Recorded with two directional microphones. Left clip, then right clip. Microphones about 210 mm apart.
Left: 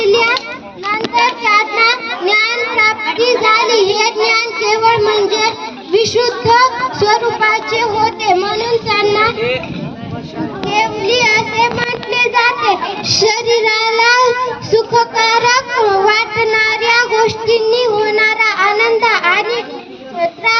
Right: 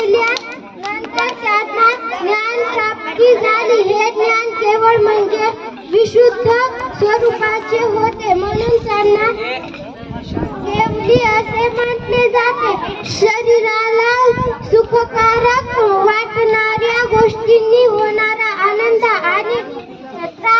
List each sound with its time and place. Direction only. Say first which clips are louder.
0.1 s children playing: left 2 dB; 40° left (ahead or behind)
1.2 s child singing: left 3 dB; 40° left (ahead or behind)
11.1 s child singing: even; 30° left (ahead or behind)